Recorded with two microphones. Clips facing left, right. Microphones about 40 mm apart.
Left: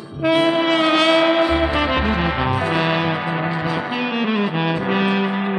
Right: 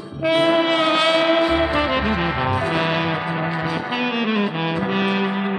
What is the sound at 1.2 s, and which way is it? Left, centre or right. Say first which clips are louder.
Music: left 1 dB; centre.